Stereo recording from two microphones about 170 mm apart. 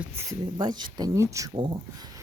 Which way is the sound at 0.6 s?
25° right (ahead or behind).